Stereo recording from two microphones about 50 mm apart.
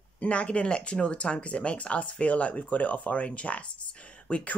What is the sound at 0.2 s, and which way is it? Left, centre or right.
Speech, left.